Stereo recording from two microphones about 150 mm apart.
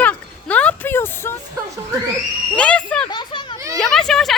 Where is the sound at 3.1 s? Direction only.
30° left (ahead or behind).